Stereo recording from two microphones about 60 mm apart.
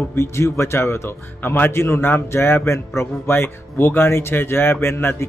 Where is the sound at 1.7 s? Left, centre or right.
Left.